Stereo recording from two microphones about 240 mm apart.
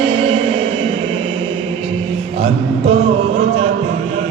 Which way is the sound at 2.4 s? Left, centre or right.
Right.